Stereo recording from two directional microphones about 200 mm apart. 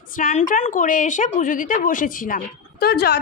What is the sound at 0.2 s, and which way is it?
A woman's voice, 40° left (ahead or behind).